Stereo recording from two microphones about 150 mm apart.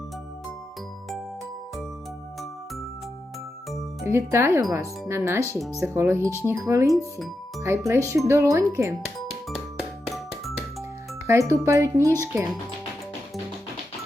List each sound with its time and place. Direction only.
4.0 s chime: 20° right (ahead or behind)
4.7 s speech: 20° right (ahead or behind)
8.3 s chime: 20° right (ahead or behind)
9.7 s music: centre (ahead or behind)
11.3 s speech: 20° right (ahead or behind)